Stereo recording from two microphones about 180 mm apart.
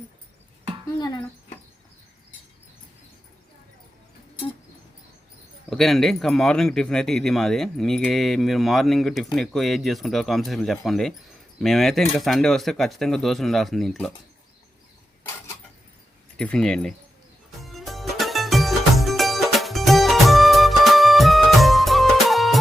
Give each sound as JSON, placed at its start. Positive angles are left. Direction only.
{"t": 0.9, "sound": "speech", "side_deg": 20}
{"t": 5.7, "sound": "speech", "side_deg": 0}
{"t": 16.4, "sound": "speech", "side_deg": 5}
{"t": 17.6, "sound": "music", "side_deg": 0}